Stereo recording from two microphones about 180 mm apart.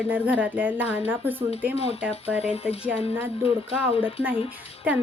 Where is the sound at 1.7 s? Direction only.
35° left (ahead or behind).